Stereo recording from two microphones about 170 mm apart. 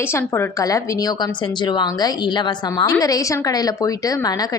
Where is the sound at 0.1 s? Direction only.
15° left (ahead or behind).